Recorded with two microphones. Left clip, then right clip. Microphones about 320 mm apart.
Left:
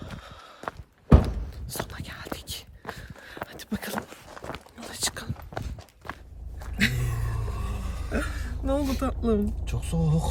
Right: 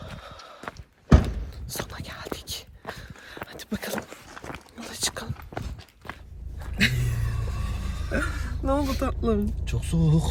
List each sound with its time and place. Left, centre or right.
0.0 s horse: centre
1.1 s whispering: centre
4.4 s walk: centre
6.6 s vehicle: centre
7.3 s music: centre
8.1 s a sound: centre